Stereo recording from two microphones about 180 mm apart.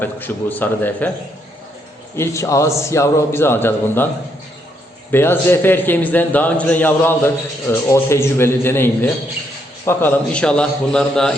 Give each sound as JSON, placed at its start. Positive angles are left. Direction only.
{"t": 0.0, "sound": "a man's voice", "side_deg": 10}
{"t": 2.1, "sound": "a man's voice", "side_deg": 15}
{"t": 5.1, "sound": "a man's voice", "side_deg": 10}